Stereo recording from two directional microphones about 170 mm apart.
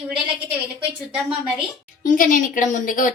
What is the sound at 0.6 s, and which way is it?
A woman's voice, centre (ahead or behind).